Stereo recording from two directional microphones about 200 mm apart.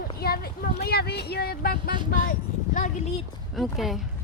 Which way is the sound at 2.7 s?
40° left (ahead or behind).